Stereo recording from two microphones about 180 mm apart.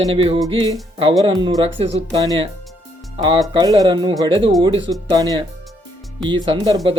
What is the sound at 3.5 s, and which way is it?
Speech, 20° right (ahead or behind).